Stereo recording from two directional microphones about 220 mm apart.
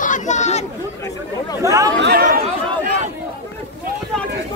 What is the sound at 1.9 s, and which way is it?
Chatter, 45° right (ahead or behind).